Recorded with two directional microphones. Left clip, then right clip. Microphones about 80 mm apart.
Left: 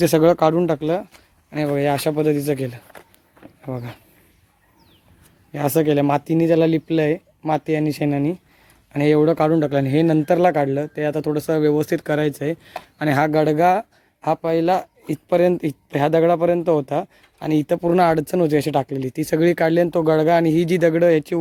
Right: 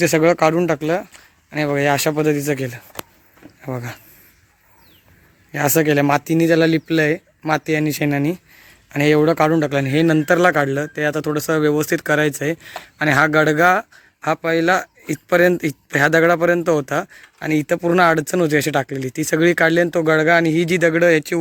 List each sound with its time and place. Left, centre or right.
0.0 s speech: left
0.3 s speech: left
3.6 s speech: centre
5.5 s speech: centre
8.9 s speech: centre
17.4 s speech: left